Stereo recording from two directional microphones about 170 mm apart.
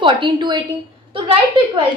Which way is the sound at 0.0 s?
30° right (ahead or behind).